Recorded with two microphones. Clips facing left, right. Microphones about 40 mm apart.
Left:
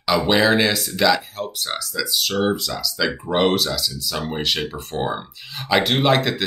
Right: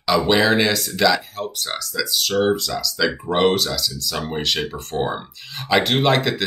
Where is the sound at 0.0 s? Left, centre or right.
Centre.